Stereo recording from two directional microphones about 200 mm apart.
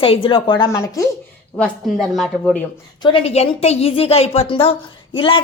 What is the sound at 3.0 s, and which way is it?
A woman's voice, 25° left (ahead or behind).